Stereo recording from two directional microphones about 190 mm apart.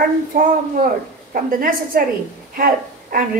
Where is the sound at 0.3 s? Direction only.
45° right (ahead or behind).